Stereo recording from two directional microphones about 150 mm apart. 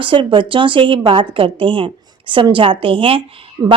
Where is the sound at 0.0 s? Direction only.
35° right (ahead or behind).